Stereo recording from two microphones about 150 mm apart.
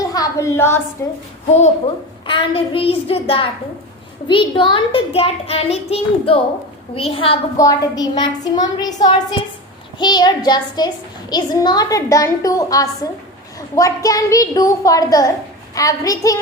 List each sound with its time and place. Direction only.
0.0 s a sound: 25° left (ahead or behind)
1.0 s a woman's voice: 15° left (ahead or behind)
2.2 s a child's voice: 35° left (ahead or behind)
7.5 s a child's voice: 25° left (ahead or behind)